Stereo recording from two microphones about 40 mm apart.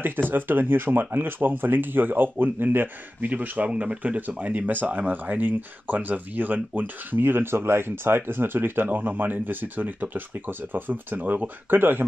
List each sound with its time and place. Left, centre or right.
0.3 s speech: right
3.3 s speech: right
8.9 s speech: right